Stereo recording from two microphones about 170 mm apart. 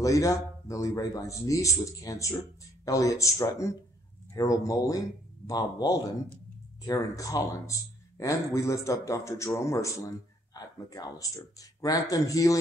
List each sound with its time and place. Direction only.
0.0 s speech: 20° left (ahead or behind)